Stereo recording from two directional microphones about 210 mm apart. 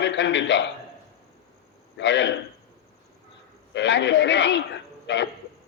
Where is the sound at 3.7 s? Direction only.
55° left (ahead or behind).